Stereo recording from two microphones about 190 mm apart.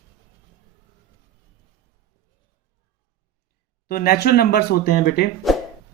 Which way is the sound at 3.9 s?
55° left (ahead or behind).